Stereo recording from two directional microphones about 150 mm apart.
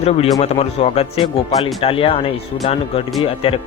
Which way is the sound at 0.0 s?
45° left (ahead or behind).